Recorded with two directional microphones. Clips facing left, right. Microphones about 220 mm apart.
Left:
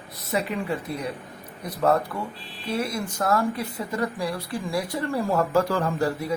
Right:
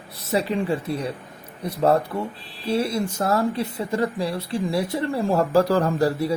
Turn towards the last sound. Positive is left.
turn(degrees=-35)  # may be behind; listen again after turning